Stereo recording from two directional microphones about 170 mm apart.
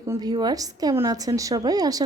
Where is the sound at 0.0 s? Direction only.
20° right (ahead or behind).